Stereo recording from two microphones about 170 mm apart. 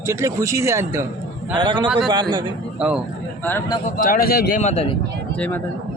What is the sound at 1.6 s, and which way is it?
Speech, 30° right (ahead or behind).